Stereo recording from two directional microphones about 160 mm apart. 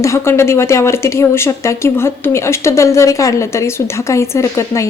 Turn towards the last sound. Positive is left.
turn(degrees=20)  # may be behind; listen again after turning